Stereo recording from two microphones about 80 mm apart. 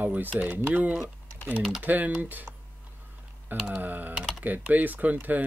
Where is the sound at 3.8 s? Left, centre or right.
Right.